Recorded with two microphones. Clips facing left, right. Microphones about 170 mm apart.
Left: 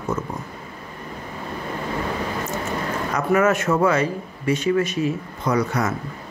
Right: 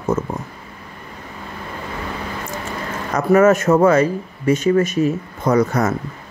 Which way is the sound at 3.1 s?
40° right (ahead or behind).